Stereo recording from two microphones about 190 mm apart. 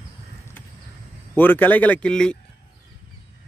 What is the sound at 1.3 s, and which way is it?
A man's voice, 10° left (ahead or behind).